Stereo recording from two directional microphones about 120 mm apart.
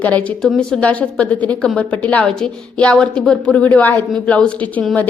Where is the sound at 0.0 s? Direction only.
10° left (ahead or behind).